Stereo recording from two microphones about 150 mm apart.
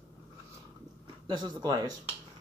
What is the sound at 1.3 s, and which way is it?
Speech, 30° right (ahead or behind).